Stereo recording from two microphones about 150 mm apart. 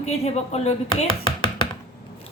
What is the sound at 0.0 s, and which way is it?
Speech, 45° left (ahead or behind).